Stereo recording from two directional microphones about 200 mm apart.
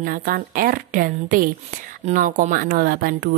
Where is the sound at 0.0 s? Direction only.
45° right (ahead or behind).